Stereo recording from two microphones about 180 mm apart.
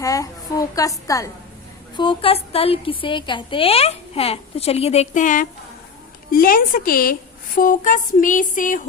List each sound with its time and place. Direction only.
0.0 s a woman's voice: 20° left (ahead or behind)
2.0 s a woman's voice: 30° left (ahead or behind); by 8.8 s 45° left (ahead or behind)